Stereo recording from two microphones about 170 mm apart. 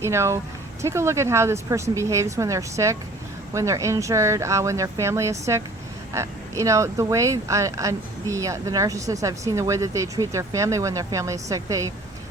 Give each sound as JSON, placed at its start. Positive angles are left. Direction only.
{"t": 0.0, "sound": "speech", "side_deg": -15}